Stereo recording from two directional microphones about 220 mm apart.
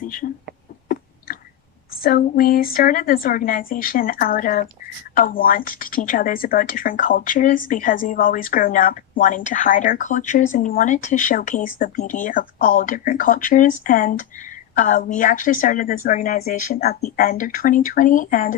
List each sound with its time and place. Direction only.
0.0 s speech: 40° left (ahead or behind)
2.0 s speech: 40° left (ahead or behind)